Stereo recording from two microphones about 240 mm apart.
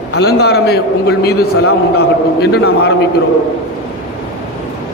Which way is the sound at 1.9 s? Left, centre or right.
Left.